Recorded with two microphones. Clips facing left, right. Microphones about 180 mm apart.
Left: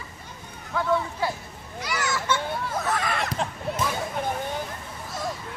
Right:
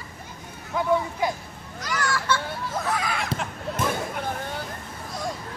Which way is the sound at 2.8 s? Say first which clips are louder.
Right 1 dB; centre (ahead or behind).